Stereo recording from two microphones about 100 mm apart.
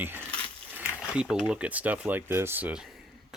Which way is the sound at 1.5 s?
10° right (ahead or behind).